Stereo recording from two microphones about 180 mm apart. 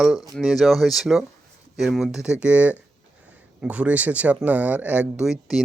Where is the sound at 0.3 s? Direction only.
Centre (ahead or behind).